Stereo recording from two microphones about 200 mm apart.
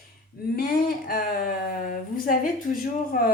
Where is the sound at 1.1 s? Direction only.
45° left (ahead or behind).